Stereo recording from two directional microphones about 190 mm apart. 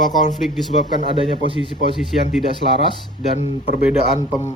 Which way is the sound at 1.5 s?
30° right (ahead or behind).